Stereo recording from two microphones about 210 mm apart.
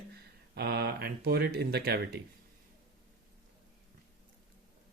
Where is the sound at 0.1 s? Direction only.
50° right (ahead or behind).